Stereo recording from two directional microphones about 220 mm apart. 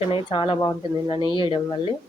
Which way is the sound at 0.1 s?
20° left (ahead or behind).